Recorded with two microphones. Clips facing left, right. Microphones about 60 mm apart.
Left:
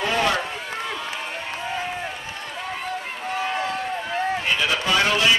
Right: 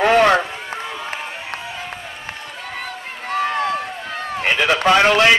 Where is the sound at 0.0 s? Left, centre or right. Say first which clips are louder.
Right 9 dB; right.